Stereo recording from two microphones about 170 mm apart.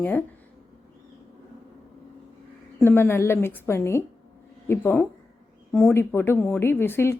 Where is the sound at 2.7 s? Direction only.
15° left (ahead or behind).